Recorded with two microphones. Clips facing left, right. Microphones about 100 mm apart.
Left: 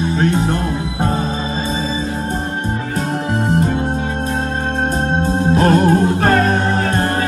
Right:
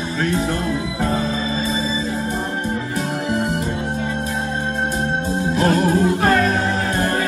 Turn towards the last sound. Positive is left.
turn(degrees=35)  # may be behind; listen again after turning